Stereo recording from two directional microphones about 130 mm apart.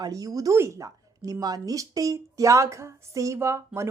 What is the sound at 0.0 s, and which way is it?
A woman's voice, 30° right (ahead or behind).